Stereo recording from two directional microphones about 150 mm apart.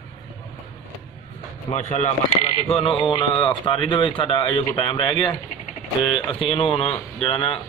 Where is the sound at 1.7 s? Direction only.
55° left (ahead or behind).